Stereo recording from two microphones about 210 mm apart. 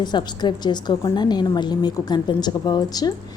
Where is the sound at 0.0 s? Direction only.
20° left (ahead or behind).